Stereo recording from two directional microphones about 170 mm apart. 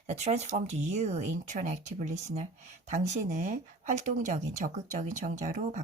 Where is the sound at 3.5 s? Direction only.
50° right (ahead or behind).